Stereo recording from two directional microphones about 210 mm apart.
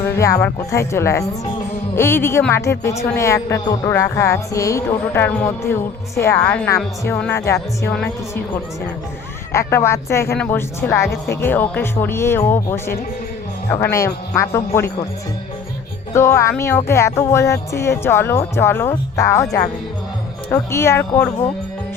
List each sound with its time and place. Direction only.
0.0 s speech: 15° left (ahead or behind)
9.5 s speech: 15° left (ahead or behind)
16.1 s speech: 15° left (ahead or behind)